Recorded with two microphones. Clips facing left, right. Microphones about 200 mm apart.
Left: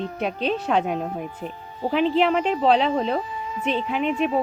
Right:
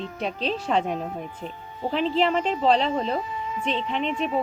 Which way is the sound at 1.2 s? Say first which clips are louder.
Left 3 dB; 35° left (ahead or behind).